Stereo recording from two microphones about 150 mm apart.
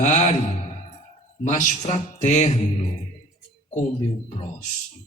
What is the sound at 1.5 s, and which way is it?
A man's voice, 55° left (ahead or behind).